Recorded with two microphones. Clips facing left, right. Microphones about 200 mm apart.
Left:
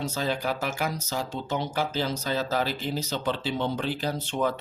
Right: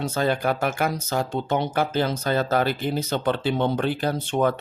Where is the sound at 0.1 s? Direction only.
55° right (ahead or behind).